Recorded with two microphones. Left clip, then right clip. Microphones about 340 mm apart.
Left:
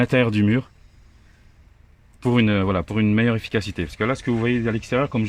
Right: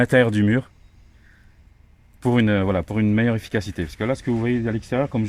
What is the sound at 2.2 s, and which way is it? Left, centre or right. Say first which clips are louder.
Speech: even; centre.